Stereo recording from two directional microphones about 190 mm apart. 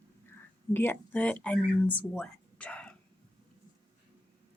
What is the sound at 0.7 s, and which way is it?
Speech, 10° left (ahead or behind).